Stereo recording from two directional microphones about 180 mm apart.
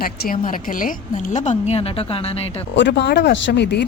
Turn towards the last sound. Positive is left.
turn(degrees=70)  # may be behind; listen again after turning